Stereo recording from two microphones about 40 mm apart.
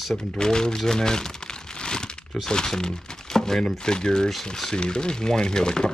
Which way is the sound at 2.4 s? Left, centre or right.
Centre.